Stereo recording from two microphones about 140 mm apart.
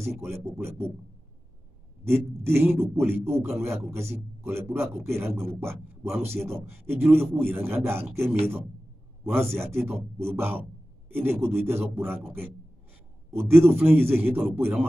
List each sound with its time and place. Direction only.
0.0 s a man's voice: 20° right (ahead or behind)
2.0 s a man's voice: 15° right (ahead or behind)
13.3 s a man's voice: 20° right (ahead or behind)